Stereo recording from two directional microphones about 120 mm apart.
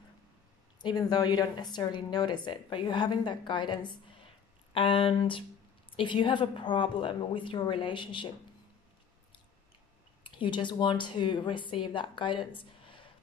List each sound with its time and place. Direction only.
0.7 s a woman's voice: 35° left (ahead or behind)
10.2 s a woman's voice: 40° left (ahead or behind)